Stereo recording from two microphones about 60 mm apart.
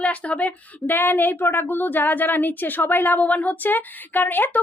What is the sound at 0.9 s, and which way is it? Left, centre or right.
A woman's voice, left.